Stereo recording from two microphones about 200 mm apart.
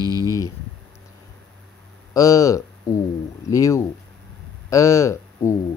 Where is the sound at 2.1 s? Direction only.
15° left (ahead or behind).